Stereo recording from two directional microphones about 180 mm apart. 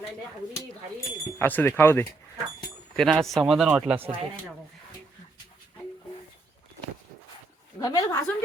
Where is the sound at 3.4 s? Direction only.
5° right (ahead or behind).